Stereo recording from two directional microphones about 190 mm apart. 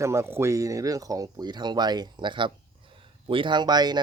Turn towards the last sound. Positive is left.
turn(degrees=-20)  # may be behind; listen again after turning